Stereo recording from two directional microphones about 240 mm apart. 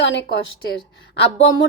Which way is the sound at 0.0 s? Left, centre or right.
Left.